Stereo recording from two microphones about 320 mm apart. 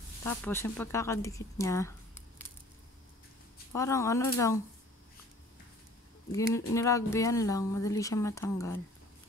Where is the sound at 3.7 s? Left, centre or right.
Centre.